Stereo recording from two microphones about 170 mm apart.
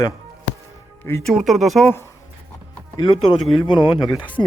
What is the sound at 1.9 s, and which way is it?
Speech, 15° left (ahead or behind).